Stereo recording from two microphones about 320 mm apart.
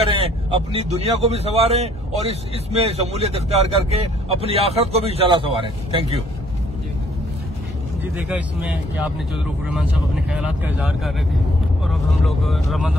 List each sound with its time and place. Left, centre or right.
0.0 s speech: centre
8.0 s speech: centre